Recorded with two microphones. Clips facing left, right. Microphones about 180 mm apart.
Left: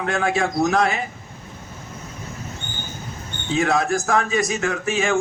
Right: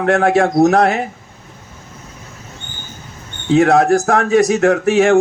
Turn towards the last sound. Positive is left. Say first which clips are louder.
# right 10 dB
turn(degrees=-65)  # may be behind; listen again after turning